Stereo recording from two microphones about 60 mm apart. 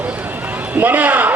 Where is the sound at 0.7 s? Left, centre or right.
Right.